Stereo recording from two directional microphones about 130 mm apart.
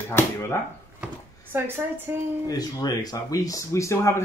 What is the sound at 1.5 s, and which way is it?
Speech, 15° right (ahead or behind).